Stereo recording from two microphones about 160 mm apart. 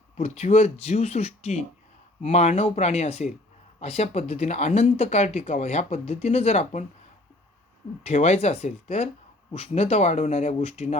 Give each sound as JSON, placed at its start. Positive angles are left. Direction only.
{"t": 0.2, "sound": "speech", "side_deg": 40}
{"t": 8.0, "sound": "speech", "side_deg": 45}